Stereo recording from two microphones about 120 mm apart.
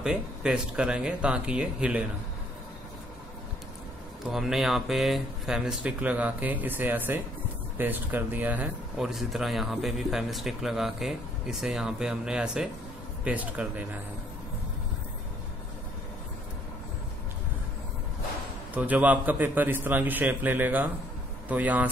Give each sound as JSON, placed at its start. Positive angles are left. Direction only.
{"t": 0.0, "sound": "speech", "side_deg": -10}
{"t": 4.3, "sound": "speech", "side_deg": -5}
{"t": 9.0, "sound": "speech", "side_deg": 0}
{"t": 18.8, "sound": "speech", "side_deg": -10}